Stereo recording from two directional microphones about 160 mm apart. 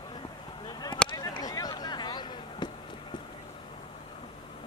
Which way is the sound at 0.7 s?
25° left (ahead or behind).